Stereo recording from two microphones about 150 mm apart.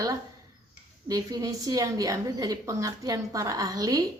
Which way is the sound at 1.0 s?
25° right (ahead or behind).